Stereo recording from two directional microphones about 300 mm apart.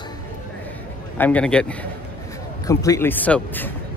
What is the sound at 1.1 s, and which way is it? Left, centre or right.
A man's voice, centre.